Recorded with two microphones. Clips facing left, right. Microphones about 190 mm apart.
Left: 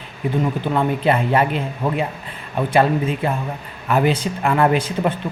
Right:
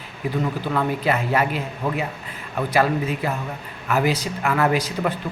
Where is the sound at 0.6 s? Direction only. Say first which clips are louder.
Left 4 dB; 25° left (ahead or behind).